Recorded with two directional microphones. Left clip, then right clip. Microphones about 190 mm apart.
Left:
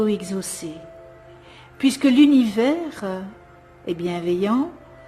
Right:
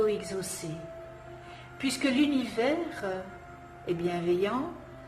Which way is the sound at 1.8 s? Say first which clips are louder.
Left 11 dB; 50° left (ahead or behind).